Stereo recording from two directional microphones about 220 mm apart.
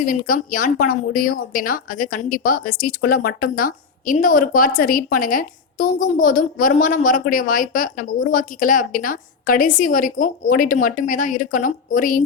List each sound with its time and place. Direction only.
0.0 s a woman's voice: 40° left (ahead or behind)